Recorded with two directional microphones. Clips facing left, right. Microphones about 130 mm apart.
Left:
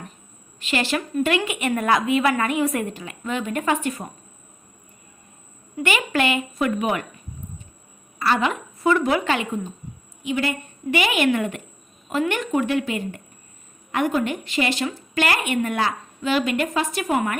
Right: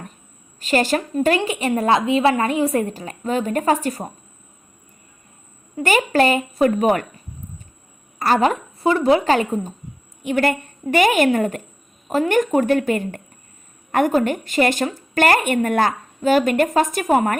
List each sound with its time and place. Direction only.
0.6 s a woman's voice: 40° right (ahead or behind)
5.7 s a woman's voice: 40° right (ahead or behind)
8.2 s a woman's voice: 40° right (ahead or behind)
10.2 s a woman's voice: 50° right (ahead or behind)